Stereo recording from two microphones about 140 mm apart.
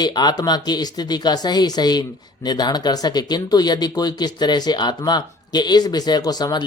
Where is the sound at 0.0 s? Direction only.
30° left (ahead or behind).